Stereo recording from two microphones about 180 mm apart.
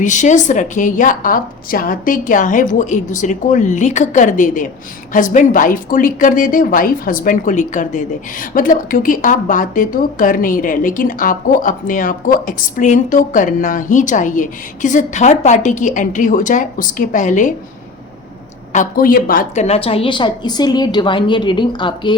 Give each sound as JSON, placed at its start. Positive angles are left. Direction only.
{"t": 0.0, "sound": "a woman's voice", "side_deg": 45}
{"t": 18.7, "sound": "a woman's voice", "side_deg": 50}
{"t": 19.6, "sound": "a woman's voice", "side_deg": 35}